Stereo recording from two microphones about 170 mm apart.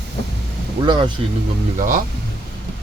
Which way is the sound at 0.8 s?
25° right (ahead or behind).